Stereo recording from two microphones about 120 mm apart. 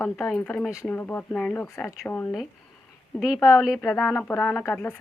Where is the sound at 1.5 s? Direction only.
20° left (ahead or behind).